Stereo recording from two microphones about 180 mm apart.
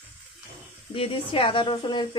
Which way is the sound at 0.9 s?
30° left (ahead or behind).